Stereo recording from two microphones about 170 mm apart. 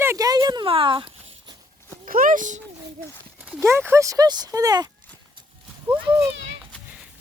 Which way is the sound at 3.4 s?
10° right (ahead or behind).